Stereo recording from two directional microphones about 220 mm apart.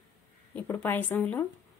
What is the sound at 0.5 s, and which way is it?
Speech, 10° left (ahead or behind).